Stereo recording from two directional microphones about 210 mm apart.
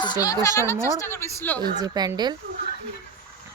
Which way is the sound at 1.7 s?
20° right (ahead or behind).